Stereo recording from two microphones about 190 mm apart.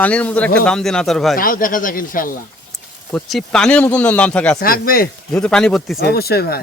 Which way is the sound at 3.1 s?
Centre (ahead or behind).